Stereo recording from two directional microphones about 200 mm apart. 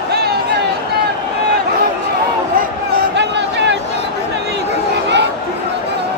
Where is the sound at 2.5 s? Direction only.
55° right (ahead or behind).